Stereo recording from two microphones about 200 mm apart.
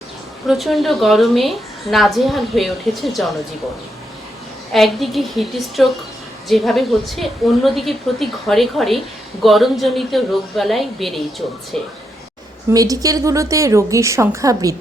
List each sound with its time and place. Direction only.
0.4 s a woman's voice: centre (ahead or behind)
4.7 s a woman's voice: centre (ahead or behind)
12.7 s a woman's voice: 15° right (ahead or behind)